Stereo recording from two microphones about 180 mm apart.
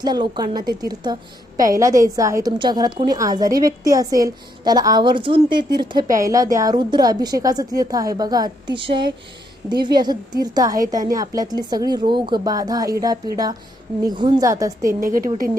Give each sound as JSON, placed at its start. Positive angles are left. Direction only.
{"t": 0.0, "sound": "a woman's voice", "side_deg": -25}
{"t": 14.8, "sound": "a woman's voice", "side_deg": -50}